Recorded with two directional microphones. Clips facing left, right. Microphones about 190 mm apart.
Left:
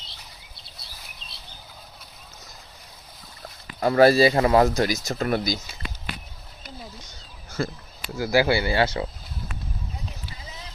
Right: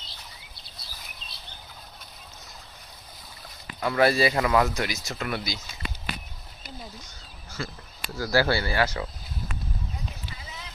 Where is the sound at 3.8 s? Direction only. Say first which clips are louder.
Left 6 dB; 40° left (ahead or behind).